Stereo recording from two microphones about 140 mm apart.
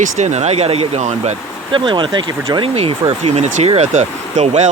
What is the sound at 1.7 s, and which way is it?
Speech, 35° right (ahead or behind).